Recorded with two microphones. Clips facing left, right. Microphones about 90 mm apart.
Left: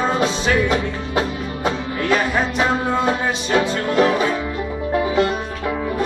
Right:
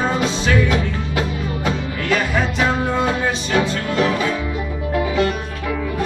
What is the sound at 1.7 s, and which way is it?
Music, 25° left (ahead or behind).